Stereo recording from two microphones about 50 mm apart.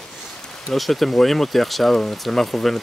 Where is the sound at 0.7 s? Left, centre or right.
Centre.